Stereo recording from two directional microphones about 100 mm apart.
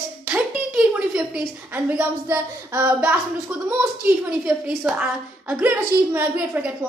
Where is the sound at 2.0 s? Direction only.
20° right (ahead or behind).